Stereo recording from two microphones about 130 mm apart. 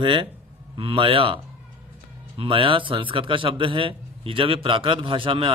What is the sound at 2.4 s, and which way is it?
A man's voice, 45° right (ahead or behind).